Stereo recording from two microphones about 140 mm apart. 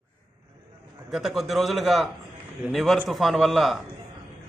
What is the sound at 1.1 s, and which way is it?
A man's voice, centre (ahead or behind).